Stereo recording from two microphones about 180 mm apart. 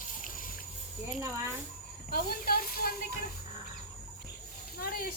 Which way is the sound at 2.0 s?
55° left (ahead or behind).